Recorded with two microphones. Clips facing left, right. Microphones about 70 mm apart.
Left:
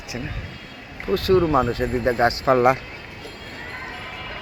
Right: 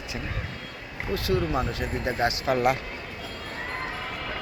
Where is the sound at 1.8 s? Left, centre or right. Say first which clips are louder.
Left 7 dB; left.